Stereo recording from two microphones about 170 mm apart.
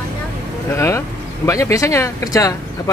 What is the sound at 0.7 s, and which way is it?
Speech, 15° left (ahead or behind).